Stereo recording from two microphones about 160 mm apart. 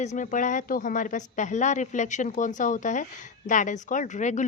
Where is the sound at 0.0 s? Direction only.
50° left (ahead or behind).